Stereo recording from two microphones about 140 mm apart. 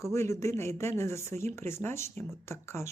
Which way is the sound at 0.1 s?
20° left (ahead or behind).